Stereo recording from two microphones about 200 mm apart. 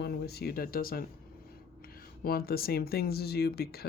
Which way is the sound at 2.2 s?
50° left (ahead or behind).